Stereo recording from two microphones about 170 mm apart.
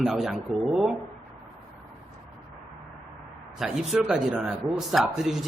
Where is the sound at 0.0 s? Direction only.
Centre (ahead or behind).